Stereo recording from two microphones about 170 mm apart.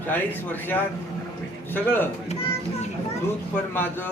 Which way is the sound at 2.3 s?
40° left (ahead or behind).